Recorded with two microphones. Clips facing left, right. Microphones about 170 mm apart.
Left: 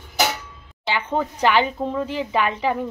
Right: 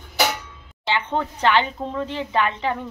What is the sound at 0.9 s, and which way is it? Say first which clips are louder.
A woman's voice: even; 10° left (ahead or behind).